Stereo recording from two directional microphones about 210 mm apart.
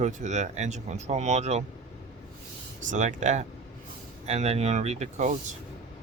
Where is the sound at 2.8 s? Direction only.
35° right (ahead or behind).